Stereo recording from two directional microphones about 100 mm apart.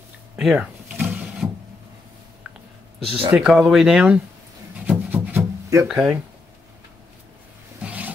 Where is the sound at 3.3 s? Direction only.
5° right (ahead or behind).